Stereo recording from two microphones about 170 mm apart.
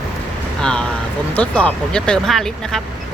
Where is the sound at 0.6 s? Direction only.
5° left (ahead or behind).